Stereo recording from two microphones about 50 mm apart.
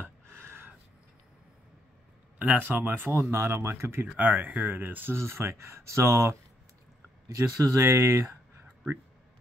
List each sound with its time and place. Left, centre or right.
0.0 s a sound: right
2.3 s a sound: right
2.6 s speech: right
3.3 s speech: right
4.2 s speech: right
5.1 s speech: right
7.2 s speech: right